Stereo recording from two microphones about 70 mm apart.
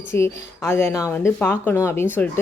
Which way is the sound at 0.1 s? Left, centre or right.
Left.